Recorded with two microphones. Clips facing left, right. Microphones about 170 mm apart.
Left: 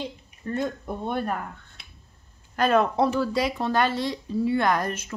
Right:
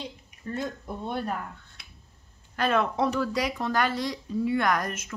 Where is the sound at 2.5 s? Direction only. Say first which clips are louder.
Left 4 dB; 40° left (ahead or behind).